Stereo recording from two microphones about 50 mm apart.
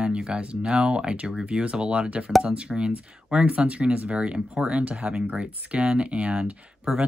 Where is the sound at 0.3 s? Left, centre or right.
Right.